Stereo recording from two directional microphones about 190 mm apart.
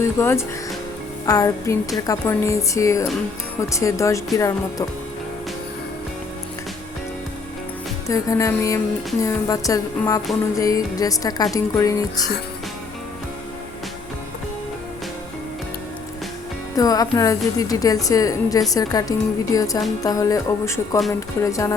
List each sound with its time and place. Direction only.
0.0 s speech: 15° left (ahead or behind)
8.0 s a woman's voice: 15° left (ahead or behind)
16.7 s a woman's voice: 20° left (ahead or behind)